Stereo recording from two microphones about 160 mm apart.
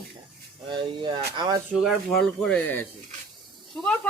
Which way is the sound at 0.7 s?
30° right (ahead or behind).